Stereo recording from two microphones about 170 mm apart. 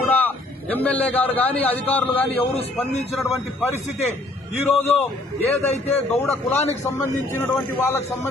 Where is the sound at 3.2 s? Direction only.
Centre (ahead or behind).